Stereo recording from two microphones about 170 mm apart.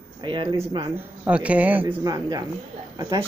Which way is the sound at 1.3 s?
5° right (ahead or behind).